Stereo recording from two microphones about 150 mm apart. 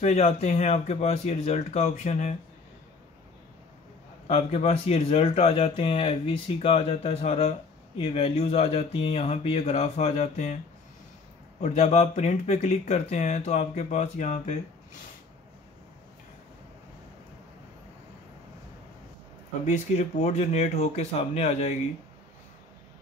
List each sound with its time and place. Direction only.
0.0 s speech: 50° left (ahead or behind)
4.3 s speech: 45° left (ahead or behind)
11.6 s speech: 50° left (ahead or behind)
19.6 s speech: 50° left (ahead or behind)